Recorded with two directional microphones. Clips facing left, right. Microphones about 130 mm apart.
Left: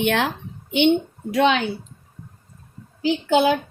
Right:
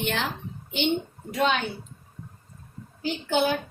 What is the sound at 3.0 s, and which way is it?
Speech, 90° left.